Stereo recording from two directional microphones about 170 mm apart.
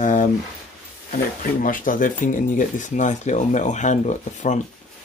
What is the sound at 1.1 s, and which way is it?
Speech, 55° left (ahead or behind).